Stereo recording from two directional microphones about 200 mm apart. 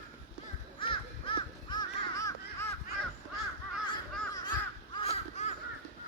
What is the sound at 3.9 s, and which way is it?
Crow, 20° left (ahead or behind).